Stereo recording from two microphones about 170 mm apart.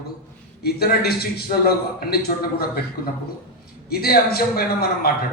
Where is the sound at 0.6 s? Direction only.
65° left (ahead or behind).